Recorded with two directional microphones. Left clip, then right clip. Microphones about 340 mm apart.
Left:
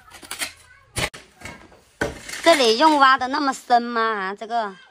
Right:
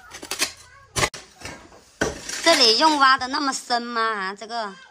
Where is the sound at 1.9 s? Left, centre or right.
Centre.